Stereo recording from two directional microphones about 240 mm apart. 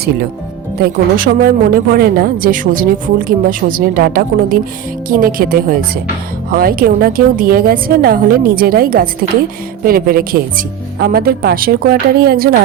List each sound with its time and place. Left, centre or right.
0.8 s speech: right